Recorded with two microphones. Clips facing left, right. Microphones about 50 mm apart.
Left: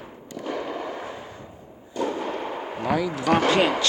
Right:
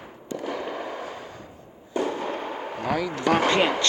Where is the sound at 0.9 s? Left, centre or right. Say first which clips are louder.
Even; centre.